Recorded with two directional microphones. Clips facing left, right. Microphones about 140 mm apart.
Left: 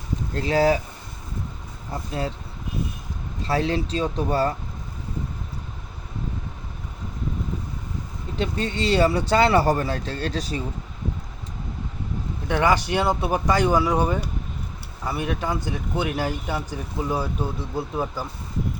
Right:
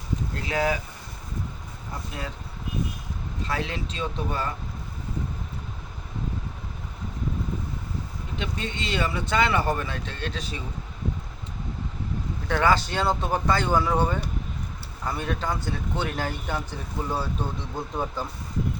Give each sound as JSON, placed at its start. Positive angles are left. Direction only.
{"t": 0.3, "sound": "speech", "side_deg": 30}
{"t": 3.4, "sound": "speech", "side_deg": 35}
{"t": 8.4, "sound": "speech", "side_deg": 35}
{"t": 12.5, "sound": "speech", "side_deg": 15}